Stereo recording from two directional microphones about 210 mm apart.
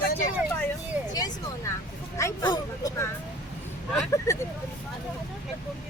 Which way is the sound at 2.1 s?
15° left (ahead or behind).